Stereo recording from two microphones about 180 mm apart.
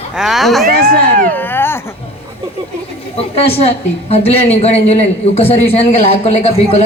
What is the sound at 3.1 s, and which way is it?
A woman's voice, 35° left (ahead or behind).